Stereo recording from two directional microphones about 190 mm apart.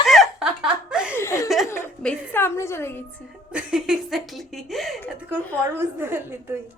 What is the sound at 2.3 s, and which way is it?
Speech, 15° left (ahead or behind).